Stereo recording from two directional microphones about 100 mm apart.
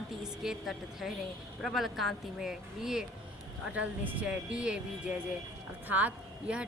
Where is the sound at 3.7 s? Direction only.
15° right (ahead or behind).